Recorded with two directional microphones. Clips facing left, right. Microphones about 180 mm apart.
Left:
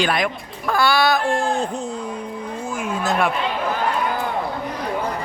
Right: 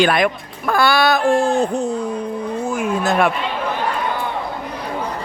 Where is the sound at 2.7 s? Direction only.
60° right (ahead or behind).